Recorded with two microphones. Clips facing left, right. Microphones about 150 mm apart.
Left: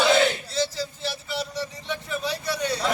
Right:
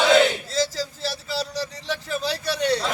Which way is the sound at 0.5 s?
90° right.